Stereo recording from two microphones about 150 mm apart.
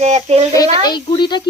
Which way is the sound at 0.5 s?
30° left (ahead or behind).